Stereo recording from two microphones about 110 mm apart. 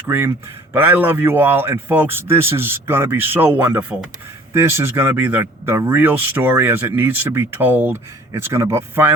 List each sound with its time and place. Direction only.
0.1 s speech: 20° right (ahead or behind)